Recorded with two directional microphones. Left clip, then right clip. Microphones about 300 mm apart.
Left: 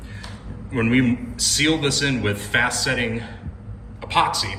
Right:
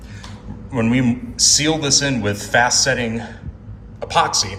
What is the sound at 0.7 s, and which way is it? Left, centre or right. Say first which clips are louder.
A man's voice: right 1 dB; centre.